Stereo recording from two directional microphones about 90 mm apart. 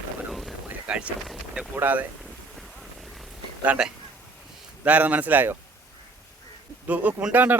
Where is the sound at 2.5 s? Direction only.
Centre (ahead or behind).